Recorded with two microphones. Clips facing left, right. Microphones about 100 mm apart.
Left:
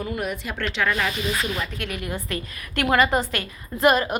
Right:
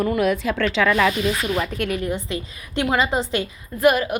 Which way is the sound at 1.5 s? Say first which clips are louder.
Right 7 dB; 40° right (ahead or behind).